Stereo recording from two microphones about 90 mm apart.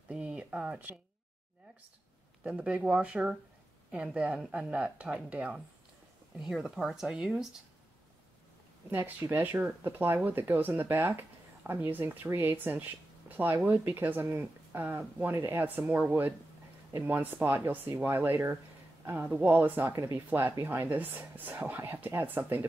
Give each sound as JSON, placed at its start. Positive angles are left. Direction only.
{"t": 0.1, "sound": "a sound", "side_deg": -10}
{"t": 2.4, "sound": "speech", "side_deg": -10}
{"t": 9.3, "sound": "speech", "side_deg": -20}
{"t": 15.3, "sound": "speech", "side_deg": -30}